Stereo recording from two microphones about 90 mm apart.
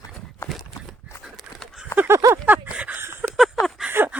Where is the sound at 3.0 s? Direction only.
25° right (ahead or behind).